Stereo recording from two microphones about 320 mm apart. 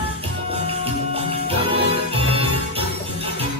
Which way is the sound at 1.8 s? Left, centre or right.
Centre.